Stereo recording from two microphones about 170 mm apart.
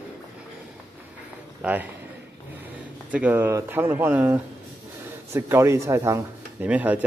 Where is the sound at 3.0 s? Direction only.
10° right (ahead or behind).